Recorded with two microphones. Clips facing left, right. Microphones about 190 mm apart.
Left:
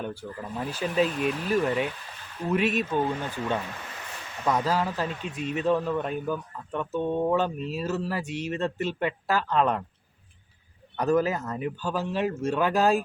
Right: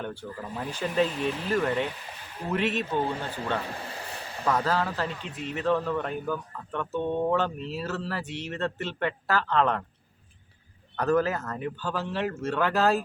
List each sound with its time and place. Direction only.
0.0 s a man's voice: 10° left (ahead or behind)
3.1 s speech: 30° right (ahead or behind)
3.7 s a sound: 30° right (ahead or behind)
4.4 s a man's voice: 10° left (ahead or behind)
10.9 s a man's voice: 15° left (ahead or behind)